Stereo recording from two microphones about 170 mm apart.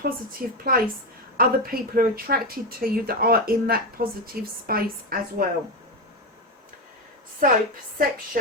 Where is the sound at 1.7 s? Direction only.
60° right (ahead or behind).